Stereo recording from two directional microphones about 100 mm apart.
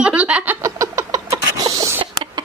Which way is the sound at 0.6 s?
30° right (ahead or behind).